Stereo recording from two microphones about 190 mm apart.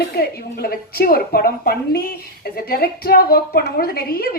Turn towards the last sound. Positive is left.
turn(degrees=55)  # may be behind; listen again after turning